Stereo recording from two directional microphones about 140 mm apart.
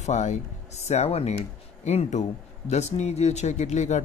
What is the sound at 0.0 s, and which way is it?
Speech, 55° left (ahead or behind).